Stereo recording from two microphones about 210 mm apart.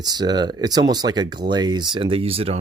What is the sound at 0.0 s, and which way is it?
Speech, 20° right (ahead or behind).